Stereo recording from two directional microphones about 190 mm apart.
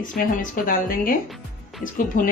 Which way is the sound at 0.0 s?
45° left (ahead or behind).